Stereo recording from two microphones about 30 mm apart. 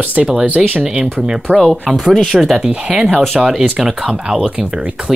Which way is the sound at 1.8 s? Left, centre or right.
Centre.